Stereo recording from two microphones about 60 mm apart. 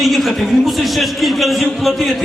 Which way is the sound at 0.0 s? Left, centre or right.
Centre.